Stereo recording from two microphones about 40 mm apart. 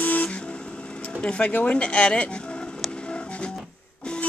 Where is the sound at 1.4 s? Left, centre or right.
Left.